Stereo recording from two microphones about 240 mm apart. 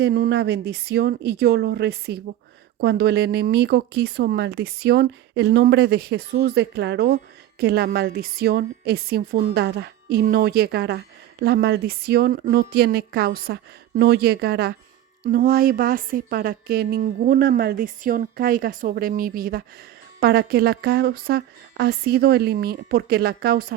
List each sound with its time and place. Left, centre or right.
0.0 s a woman's voice: right